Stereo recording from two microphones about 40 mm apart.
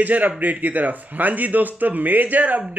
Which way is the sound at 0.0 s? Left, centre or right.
Right.